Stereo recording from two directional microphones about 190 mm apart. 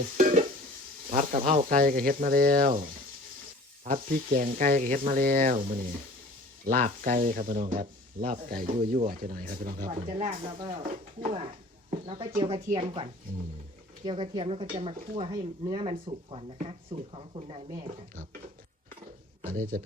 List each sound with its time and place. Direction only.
0.2 s stir: 45° right (ahead or behind)
1.1 s speech: 40° right (ahead or behind)
9.9 s speech: 35° right (ahead or behind)
11.9 s speech: 30° right (ahead or behind)
13.3 s speech: 45° right (ahead or behind)
14.0 s speech: 25° right (ahead or behind)
19.4 s speech: 45° right (ahead or behind)